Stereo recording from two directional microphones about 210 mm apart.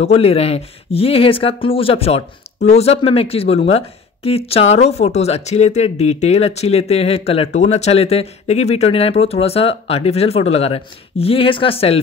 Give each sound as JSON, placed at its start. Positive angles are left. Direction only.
{"t": 0.0, "sound": "speech", "side_deg": 30}